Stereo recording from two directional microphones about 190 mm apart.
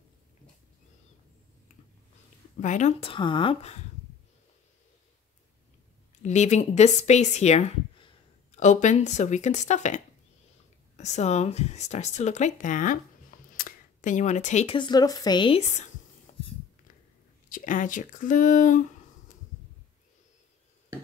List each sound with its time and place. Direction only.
2.6 s a woman's voice: 40° left (ahead or behind)
6.2 s speech: 40° left (ahead or behind)
13.6 s camera: 45° left (ahead or behind)
14.8 s a woman's voice: 20° left (ahead or behind)
17.5 s speech: 45° left (ahead or behind)